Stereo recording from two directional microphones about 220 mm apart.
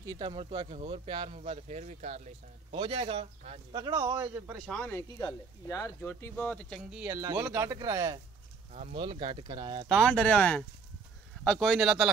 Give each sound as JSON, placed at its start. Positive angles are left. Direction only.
{"t": 0.0, "sound": "speech", "side_deg": -20}
{"t": 6.9, "sound": "speech", "side_deg": -10}
{"t": 8.7, "sound": "speech", "side_deg": -30}
{"t": 9.8, "sound": "speech", "side_deg": 0}